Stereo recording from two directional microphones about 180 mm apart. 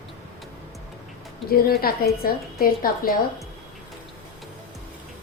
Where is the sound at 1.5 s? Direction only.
55° left (ahead or behind).